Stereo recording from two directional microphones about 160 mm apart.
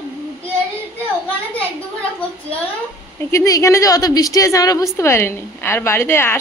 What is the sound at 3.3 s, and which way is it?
A woman's voice, 20° left (ahead or behind).